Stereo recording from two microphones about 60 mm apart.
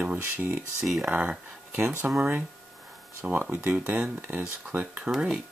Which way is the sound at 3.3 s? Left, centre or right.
Right.